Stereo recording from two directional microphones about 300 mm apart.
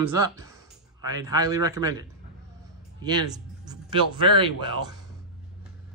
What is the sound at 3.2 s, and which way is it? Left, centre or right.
Speech, centre.